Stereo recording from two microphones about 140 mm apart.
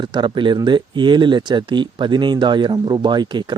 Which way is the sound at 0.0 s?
35° right (ahead or behind).